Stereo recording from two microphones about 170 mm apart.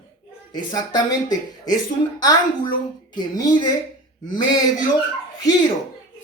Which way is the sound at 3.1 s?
25° left (ahead or behind).